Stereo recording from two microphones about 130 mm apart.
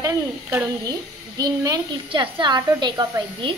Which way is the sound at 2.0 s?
40° right (ahead or behind).